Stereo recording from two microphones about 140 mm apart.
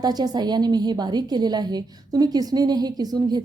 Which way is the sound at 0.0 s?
30° right (ahead or behind).